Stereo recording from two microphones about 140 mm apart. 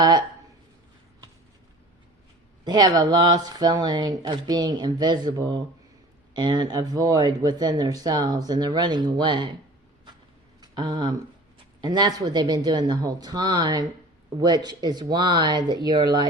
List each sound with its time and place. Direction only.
2.6 s speech: 30° right (ahead or behind)
10.6 s a sound: 30° right (ahead or behind)
11.8 s speech: 30° right (ahead or behind)